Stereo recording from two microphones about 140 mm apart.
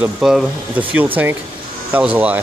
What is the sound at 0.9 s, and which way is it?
Speech, 15° right (ahead or behind).